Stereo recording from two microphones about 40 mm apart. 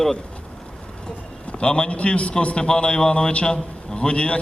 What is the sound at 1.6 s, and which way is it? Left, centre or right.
A man's voice, left.